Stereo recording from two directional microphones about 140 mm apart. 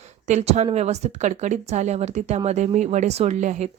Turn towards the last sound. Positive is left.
turn(degrees=-55)  # may be behind; listen again after turning